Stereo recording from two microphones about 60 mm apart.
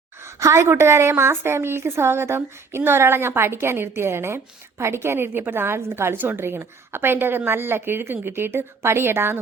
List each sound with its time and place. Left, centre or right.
0.2 s a woman's voice: right